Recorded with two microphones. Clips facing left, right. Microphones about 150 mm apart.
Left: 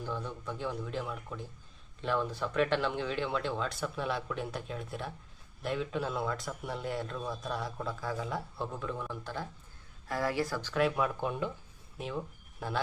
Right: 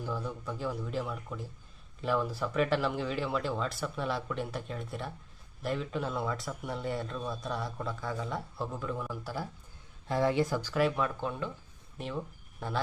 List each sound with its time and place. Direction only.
0.0 s a man's voice: 5° right (ahead or behind)
10.1 s speech: 25° right (ahead or behind)
10.9 s speech: 15° left (ahead or behind)
11.9 s speech: centre (ahead or behind)